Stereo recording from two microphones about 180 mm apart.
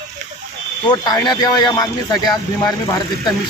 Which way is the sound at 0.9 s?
25° left (ahead or behind).